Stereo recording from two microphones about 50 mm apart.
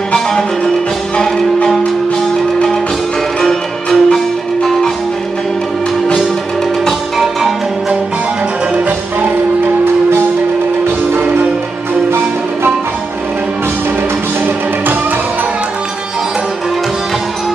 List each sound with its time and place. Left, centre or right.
0.1 s music: centre
3.3 s music: centre
6.9 s music: centre
8.7 s music: right